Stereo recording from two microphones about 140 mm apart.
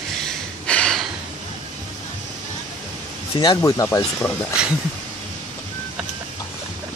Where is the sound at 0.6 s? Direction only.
5° left (ahead or behind).